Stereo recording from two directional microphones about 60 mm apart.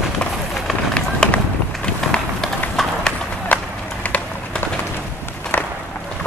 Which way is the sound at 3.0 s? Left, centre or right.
Left.